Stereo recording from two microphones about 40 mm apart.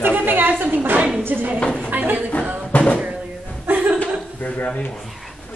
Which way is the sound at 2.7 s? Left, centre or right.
Left.